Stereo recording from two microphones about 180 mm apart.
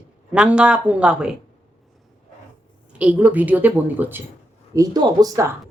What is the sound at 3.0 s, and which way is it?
Speech, 5° right (ahead or behind).